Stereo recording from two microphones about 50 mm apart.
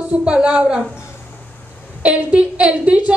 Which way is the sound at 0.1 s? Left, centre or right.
Right.